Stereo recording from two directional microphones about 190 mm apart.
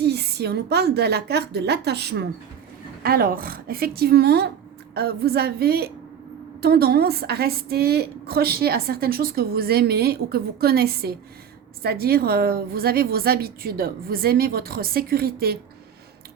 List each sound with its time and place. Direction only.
0.0 s a woman's voice: 60° right (ahead or behind)